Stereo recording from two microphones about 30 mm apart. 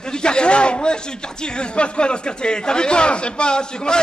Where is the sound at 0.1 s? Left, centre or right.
Left.